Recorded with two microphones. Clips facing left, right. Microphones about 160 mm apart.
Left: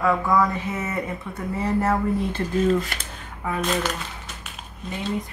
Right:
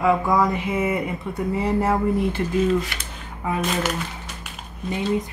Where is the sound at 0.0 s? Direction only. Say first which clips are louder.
Right 1 dB; 20° right (ahead or behind).